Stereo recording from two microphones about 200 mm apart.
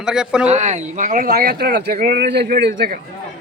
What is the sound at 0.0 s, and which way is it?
Speech, 5° right (ahead or behind).